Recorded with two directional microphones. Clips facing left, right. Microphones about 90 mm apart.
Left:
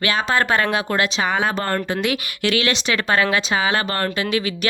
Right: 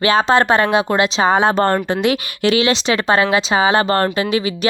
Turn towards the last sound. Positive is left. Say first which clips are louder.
# right 4 dB
turn(degrees=-25)  # may be behind; listen again after turning